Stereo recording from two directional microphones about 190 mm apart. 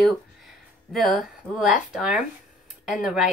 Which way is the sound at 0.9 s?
Centre (ahead or behind).